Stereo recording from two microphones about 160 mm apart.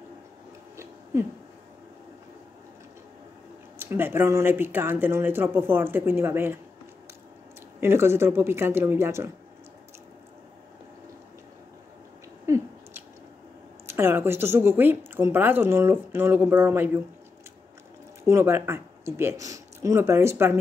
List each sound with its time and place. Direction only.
1.1 s a woman's voice: 20° right (ahead or behind)
3.7 s a woman's voice: 15° right (ahead or behind)
7.8 s a woman's voice: 15° right (ahead or behind)
12.4 s a sound: 15° right (ahead or behind)
13.8 s a woman's voice: 15° right (ahead or behind)
18.3 s a woman's voice: 15° right (ahead or behind)